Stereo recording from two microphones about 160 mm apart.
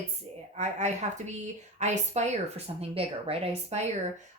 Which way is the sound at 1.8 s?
45° right (ahead or behind).